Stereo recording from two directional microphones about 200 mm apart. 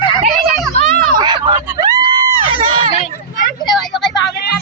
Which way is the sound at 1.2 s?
25° right (ahead or behind).